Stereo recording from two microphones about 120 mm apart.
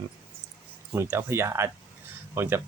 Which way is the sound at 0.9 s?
20° right (ahead or behind).